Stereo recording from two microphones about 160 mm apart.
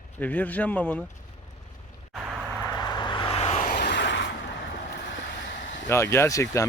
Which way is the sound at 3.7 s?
90° left.